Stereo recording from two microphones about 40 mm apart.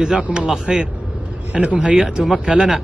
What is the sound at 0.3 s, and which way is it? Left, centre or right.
Speech, right.